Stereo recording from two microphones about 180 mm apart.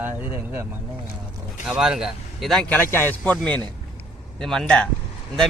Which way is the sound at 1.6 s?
5° right (ahead or behind).